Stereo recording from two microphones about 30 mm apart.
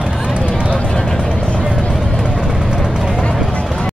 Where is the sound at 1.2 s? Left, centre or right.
Left.